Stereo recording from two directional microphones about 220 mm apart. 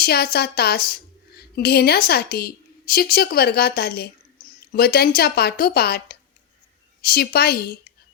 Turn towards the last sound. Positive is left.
turn(degrees=45)  # may be behind; listen again after turning